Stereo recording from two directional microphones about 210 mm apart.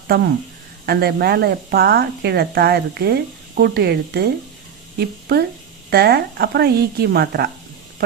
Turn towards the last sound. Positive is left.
turn(degrees=-50)  # may be behind; listen again after turning